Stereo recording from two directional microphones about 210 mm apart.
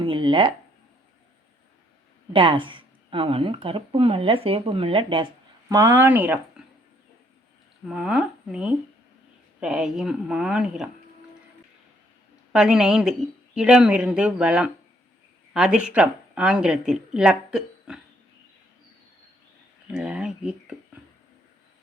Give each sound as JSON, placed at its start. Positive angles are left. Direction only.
{"t": 0.0, "sound": "speech", "side_deg": -25}
{"t": 2.3, "sound": "speech", "side_deg": -25}
{"t": 7.9, "sound": "speech", "side_deg": -5}
{"t": 12.5, "sound": "speech", "side_deg": -5}
{"t": 19.9, "sound": "speech", "side_deg": -5}